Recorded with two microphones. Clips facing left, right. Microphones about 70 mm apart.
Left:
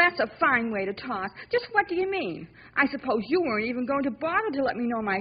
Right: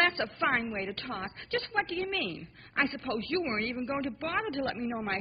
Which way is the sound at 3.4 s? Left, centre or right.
Left.